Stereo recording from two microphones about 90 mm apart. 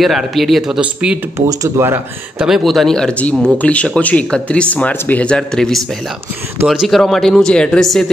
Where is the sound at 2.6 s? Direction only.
Centre (ahead or behind).